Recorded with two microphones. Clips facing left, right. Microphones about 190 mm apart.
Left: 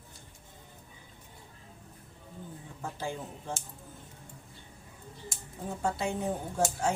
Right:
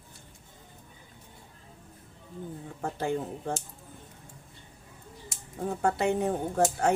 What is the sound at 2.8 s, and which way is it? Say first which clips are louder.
Speech: right 7 dB; 55° right (ahead or behind).